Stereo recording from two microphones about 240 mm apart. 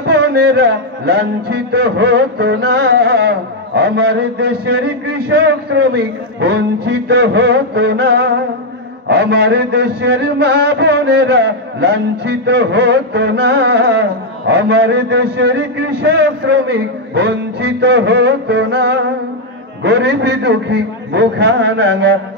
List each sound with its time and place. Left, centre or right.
0.0 s a man's voice: right